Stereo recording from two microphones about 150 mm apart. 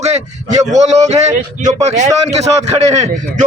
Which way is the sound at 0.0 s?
50° right (ahead or behind).